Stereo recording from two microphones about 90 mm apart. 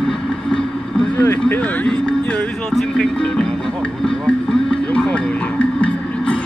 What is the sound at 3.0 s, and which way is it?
Music, 10° left (ahead or behind).